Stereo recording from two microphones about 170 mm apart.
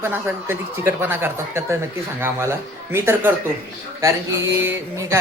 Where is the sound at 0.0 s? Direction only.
10° right (ahead or behind).